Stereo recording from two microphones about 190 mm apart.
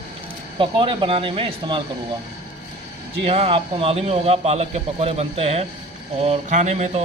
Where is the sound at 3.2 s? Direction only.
30° right (ahead or behind).